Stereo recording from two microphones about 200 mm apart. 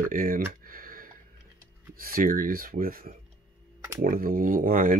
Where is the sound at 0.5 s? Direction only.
45° right (ahead or behind).